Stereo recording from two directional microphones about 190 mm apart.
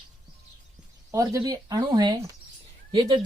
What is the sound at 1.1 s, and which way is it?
Speech, 15° right (ahead or behind).